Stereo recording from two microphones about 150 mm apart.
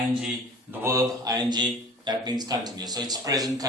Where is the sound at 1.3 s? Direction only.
30° right (ahead or behind).